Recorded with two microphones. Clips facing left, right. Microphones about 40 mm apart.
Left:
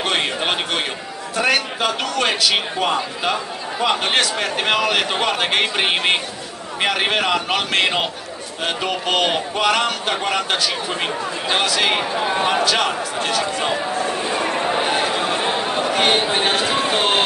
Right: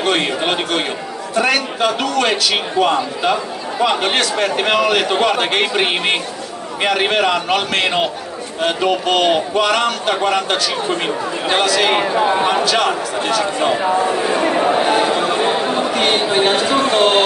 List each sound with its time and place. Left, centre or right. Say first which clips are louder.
0.0 s a sound: right 3 dB; centre
1.4 s a man's voice: right 2 dB; centre
12.1 s a man's voice: right 4 dB; centre
13.8 s speech: right 6 dB; centre
14.8 s speech: right 5 dB; centre